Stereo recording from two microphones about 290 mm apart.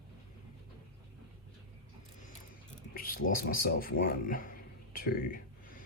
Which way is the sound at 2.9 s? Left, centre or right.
Left.